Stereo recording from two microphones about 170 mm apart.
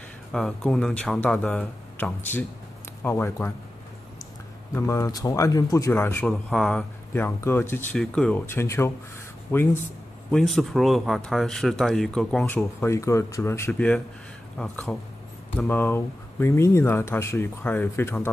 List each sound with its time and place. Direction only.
0.3 s speech: centre (ahead or behind)
4.7 s speech: 15° left (ahead or behind)
10.3 s speech: centre (ahead or behind)